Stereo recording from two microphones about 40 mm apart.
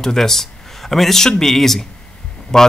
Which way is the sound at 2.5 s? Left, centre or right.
Centre.